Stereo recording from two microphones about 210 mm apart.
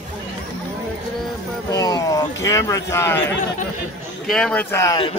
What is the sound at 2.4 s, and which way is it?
Speech, 15° left (ahead or behind).